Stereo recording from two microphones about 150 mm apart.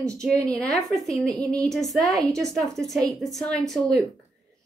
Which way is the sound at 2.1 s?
25° right (ahead or behind).